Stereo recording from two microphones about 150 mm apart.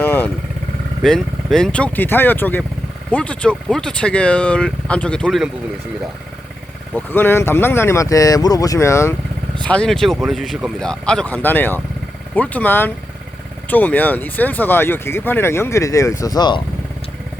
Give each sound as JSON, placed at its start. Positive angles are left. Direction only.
{"t": 0.0, "sound": "motorcycle", "side_deg": 15}
{"t": 1.0, "sound": "speech", "side_deg": 5}
{"t": 6.9, "sound": "speech", "side_deg": 15}
{"t": 9.6, "sound": "speech", "side_deg": 5}